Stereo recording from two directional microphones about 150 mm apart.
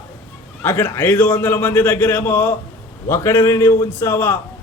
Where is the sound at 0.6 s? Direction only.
15° left (ahead or behind).